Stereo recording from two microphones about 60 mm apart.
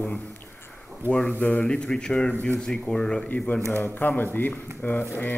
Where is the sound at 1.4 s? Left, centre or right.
Left.